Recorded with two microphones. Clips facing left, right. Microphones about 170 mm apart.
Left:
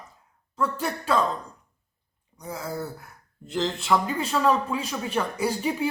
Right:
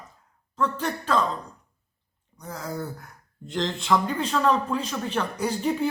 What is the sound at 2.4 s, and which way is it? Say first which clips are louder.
Speech: left 1 dB; 10° left (ahead or behind).